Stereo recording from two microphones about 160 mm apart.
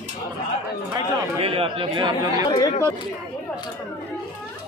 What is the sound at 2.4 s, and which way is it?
Speech, 25° left (ahead or behind).